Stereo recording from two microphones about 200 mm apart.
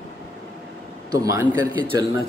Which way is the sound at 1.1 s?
15° right (ahead or behind).